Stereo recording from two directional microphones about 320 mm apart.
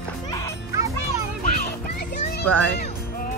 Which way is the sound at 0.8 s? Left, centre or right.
Centre.